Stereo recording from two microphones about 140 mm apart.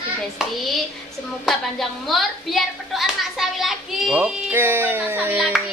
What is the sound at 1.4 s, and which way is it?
A woman's voice, centre (ahead or behind).